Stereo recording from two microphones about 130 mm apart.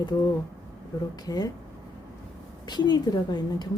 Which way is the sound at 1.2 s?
30° left (ahead or behind).